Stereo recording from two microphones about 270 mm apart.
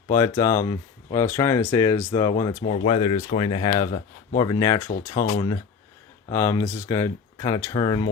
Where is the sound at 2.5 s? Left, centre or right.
Left.